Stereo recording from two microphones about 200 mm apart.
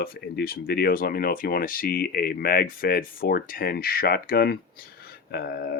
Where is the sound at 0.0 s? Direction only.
50° left (ahead or behind).